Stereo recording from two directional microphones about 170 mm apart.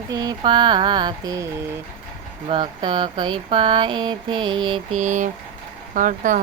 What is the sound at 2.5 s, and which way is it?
Speech, 30° right (ahead or behind).